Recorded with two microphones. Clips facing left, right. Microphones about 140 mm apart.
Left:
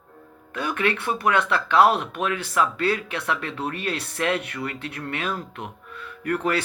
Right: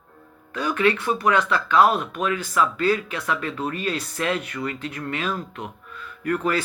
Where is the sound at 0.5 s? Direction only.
55° left (ahead or behind).